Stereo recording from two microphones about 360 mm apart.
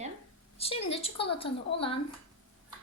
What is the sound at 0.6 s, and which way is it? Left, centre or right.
A woman's voice, centre.